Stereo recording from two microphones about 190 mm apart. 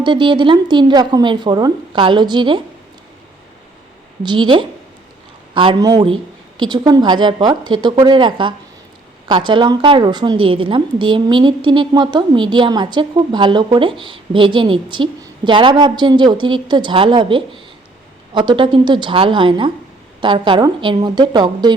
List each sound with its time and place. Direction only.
0.0 s a woman's voice: 25° right (ahead or behind)
4.2 s a woman's voice: 25° right (ahead or behind)